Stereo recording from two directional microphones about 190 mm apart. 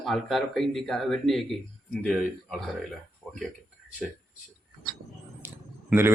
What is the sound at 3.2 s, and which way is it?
Tick-tock, 5° right (ahead or behind).